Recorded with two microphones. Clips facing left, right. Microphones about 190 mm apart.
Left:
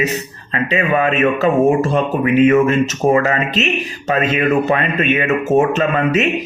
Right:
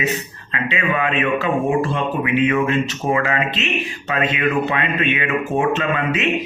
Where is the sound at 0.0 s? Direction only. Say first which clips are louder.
Left 3 dB; 40° left (ahead or behind).